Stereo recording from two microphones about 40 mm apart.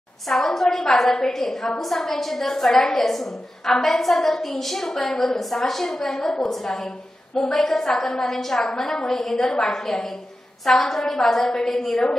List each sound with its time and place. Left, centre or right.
0.3 s a woman's voice: centre